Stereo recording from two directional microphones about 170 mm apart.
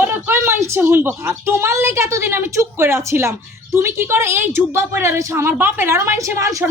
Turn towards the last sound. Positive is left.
turn(degrees=-20)  # may be behind; listen again after turning